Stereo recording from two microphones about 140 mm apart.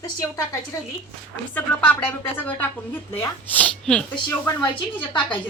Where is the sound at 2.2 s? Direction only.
15° left (ahead or behind).